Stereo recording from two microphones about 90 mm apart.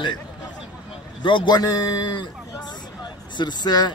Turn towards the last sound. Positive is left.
turn(degrees=50)  # may be behind; listen again after turning